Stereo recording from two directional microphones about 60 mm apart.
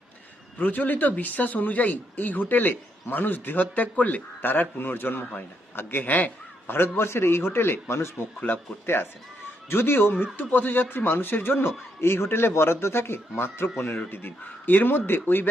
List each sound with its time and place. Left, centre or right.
0.6 s a man's voice: left
6.7 s speech: left
8.4 s a man's voice: left
9.6 s a man's voice: left